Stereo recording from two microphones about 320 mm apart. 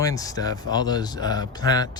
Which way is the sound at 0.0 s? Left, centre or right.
Centre.